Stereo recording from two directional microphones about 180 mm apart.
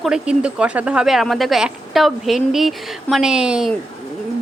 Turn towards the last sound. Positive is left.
turn(degrees=-5)  # may be behind; listen again after turning